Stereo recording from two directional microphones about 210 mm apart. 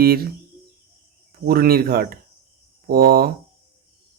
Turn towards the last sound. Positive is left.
turn(degrees=-45)  # may be behind; listen again after turning